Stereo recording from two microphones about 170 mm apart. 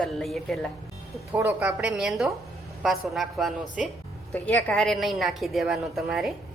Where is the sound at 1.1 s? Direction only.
10° right (ahead or behind).